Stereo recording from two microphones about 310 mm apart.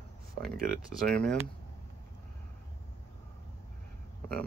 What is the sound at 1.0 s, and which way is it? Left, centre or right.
Speech, centre.